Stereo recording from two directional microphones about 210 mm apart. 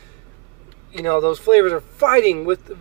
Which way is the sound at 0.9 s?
25° left (ahead or behind).